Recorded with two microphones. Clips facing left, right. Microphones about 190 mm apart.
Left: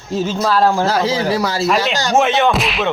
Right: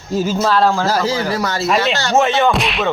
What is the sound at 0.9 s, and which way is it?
Speech, centre (ahead or behind).